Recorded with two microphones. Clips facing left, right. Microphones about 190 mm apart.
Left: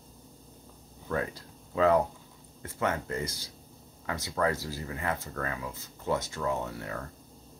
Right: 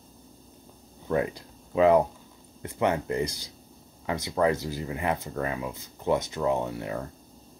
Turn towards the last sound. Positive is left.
turn(degrees=-20)  # may be behind; listen again after turning